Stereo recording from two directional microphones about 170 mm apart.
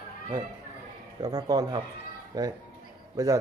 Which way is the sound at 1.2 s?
20° right (ahead or behind).